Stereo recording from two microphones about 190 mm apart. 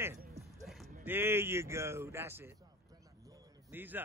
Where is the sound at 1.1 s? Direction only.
10° right (ahead or behind).